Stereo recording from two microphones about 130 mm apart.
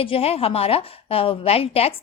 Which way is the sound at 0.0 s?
45° left (ahead or behind).